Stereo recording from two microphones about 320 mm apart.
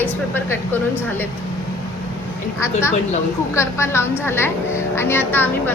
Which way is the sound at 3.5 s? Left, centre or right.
Centre.